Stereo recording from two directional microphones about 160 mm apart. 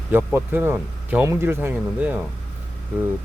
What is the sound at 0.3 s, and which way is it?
Speech, 15° right (ahead or behind).